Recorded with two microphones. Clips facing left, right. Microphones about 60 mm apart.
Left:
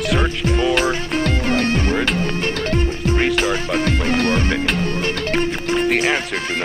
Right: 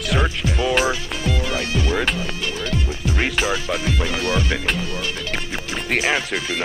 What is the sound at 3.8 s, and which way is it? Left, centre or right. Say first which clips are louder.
Music: left 6 dB; left.